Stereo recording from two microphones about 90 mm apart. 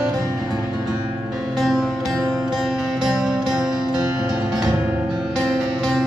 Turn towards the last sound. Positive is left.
turn(degrees=0)  # may be behind; listen again after turning